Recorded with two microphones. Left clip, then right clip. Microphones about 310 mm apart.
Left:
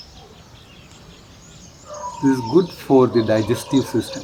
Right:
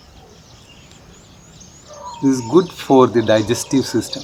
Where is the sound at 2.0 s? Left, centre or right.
Centre.